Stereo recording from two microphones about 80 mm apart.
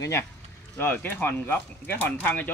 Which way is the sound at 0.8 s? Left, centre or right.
Left.